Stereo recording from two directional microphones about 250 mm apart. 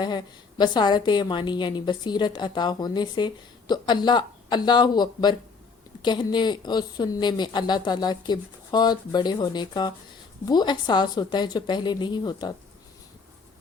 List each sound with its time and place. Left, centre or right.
0.0 s a woman's voice: centre